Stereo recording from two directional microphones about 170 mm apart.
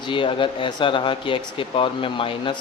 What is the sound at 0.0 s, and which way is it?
Speech, 30° left (ahead or behind).